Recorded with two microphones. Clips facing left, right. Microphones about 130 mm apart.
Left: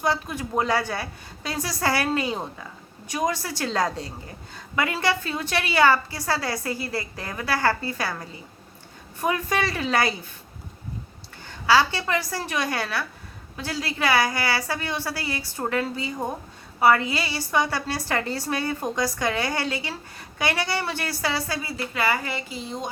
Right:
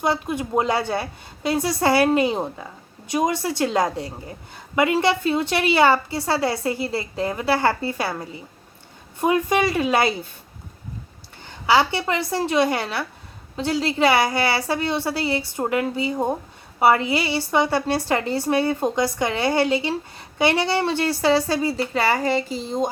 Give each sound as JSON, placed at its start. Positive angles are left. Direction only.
{"t": 0.0, "sound": "a woman's voice", "side_deg": -20}
{"t": 11.4, "sound": "a woman's voice", "side_deg": -20}